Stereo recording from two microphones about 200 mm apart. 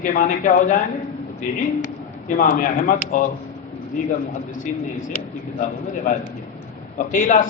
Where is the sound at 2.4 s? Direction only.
40° left (ahead or behind).